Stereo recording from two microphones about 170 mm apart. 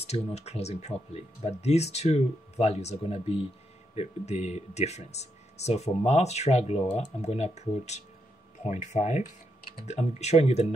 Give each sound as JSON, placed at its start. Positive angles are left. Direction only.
{"t": 0.0, "sound": "speech", "side_deg": 40}